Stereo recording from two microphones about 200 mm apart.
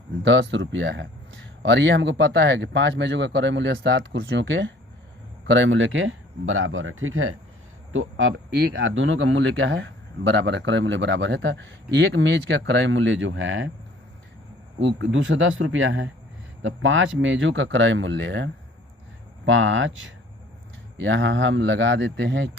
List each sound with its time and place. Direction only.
0.2 s a man's voice: 65° right (ahead or behind); by 7.3 s 90° right
7.9 s speech: 75° right (ahead or behind)
8.7 s a man's voice: 70° right (ahead or behind)
14.8 s speech: 65° right (ahead or behind)
19.5 s speech: 75° right (ahead or behind)